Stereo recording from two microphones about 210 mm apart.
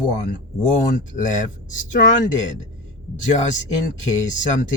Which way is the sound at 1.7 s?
35° left (ahead or behind).